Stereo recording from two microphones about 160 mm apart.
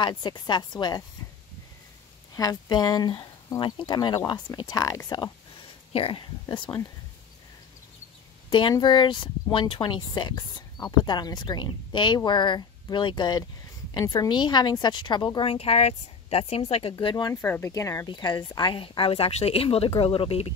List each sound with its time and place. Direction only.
0.0 s speech: 25° left (ahead or behind)
2.3 s speech: 25° left (ahead or behind)
5.9 s speech: 35° left (ahead or behind)
8.5 s speech: 30° left (ahead or behind)
16.9 s speech: 25° left (ahead or behind)
17.3 s speech: 15° left (ahead or behind); by 20.5 s 35° left (ahead or behind)